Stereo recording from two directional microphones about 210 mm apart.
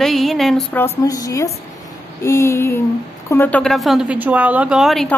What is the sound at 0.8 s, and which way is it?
A woman's voice, 15° left (ahead or behind).